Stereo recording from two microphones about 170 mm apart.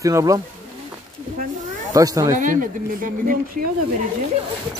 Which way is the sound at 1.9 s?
20° right (ahead or behind).